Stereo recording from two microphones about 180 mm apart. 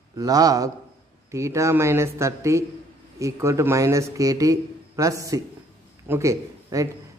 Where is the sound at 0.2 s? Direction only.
20° right (ahead or behind).